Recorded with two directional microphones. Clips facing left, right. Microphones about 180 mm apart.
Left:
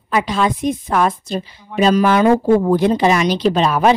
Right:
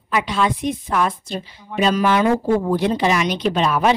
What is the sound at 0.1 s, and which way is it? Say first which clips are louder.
A woman's voice: left 3 dB; 40° left (ahead or behind).